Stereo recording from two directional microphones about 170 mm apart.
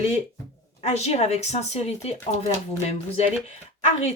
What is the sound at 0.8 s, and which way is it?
Speech, 40° left (ahead or behind).